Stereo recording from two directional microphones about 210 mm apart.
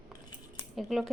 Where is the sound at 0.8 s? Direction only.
Centre (ahead or behind).